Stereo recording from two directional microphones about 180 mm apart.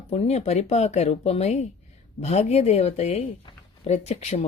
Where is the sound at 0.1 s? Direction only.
35° left (ahead or behind).